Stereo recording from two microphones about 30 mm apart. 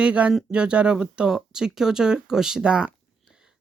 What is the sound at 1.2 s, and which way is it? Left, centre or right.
Speech, centre.